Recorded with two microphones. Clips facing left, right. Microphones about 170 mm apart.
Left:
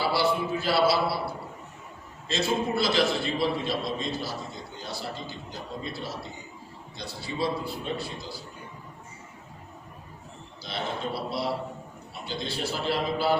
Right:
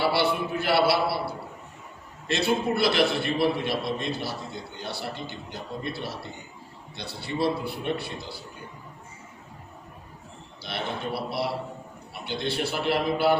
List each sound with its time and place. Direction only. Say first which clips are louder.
0.0 s a man's voice: right 1 dB; 65° right (ahead or behind)
2.2 s a man's voice: right 2 dB; 65° right (ahead or behind)
10.6 s a man's voice: even; 65° right (ahead or behind)